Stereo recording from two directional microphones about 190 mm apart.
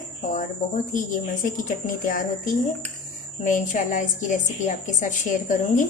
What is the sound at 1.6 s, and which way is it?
A woman's voice, 45° left (ahead or behind).